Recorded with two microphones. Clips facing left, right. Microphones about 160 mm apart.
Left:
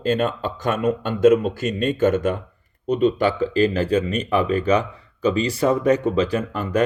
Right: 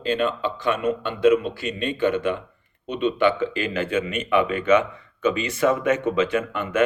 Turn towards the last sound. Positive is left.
turn(degrees=35)  # may be behind; listen again after turning